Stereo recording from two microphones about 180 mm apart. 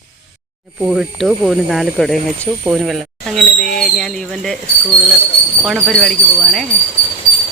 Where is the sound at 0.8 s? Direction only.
5° right (ahead or behind).